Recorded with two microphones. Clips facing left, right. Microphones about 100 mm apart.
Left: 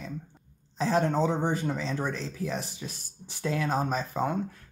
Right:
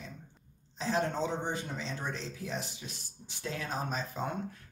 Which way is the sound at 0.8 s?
50° left (ahead or behind).